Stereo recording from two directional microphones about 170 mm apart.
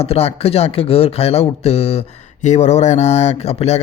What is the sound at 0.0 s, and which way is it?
Speech, 35° left (ahead or behind).